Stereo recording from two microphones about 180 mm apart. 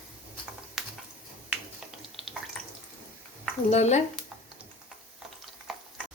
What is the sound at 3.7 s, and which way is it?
Speech, 40° left (ahead or behind).